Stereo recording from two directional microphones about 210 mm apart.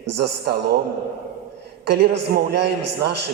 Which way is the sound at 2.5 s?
50° right (ahead or behind).